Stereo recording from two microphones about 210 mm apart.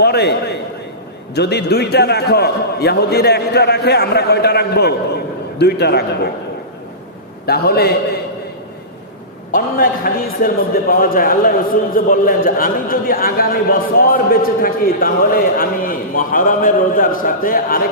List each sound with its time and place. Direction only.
0.0 s a man's voice: 50° left (ahead or behind)
7.4 s a man's voice: 45° left (ahead or behind)
9.5 s a man's voice: 45° left (ahead or behind)